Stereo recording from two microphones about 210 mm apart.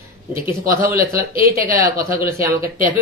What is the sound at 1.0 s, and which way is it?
Speech, 45° right (ahead or behind).